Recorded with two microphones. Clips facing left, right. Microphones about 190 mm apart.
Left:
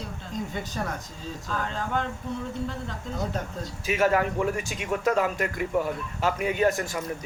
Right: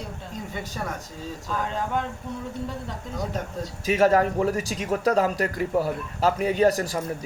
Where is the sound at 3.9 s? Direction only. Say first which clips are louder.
Right 4 dB; 40° right (ahead or behind).